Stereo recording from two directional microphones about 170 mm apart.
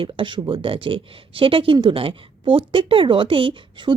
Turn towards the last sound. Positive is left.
turn(degrees=-30)  # may be behind; listen again after turning